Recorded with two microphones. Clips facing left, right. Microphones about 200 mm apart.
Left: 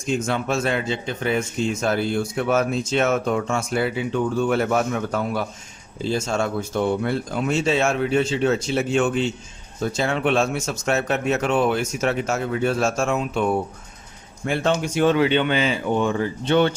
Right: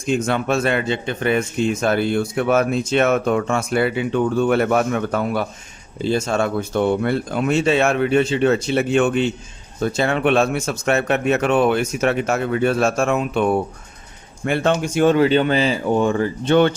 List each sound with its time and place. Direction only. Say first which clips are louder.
0.0 s speech: right 3 dB; 60° right (ahead or behind)